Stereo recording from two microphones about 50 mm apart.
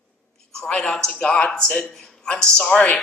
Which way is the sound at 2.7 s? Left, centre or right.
Left.